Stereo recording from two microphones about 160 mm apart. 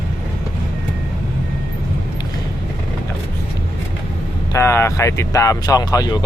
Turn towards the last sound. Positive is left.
turn(degrees=25)  # may be behind; listen again after turning